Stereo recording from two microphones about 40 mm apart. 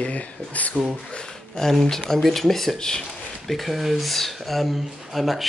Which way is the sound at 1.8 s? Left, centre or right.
Centre.